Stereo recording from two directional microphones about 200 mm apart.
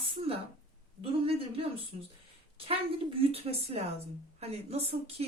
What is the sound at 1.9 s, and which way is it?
Speech, 35° right (ahead or behind).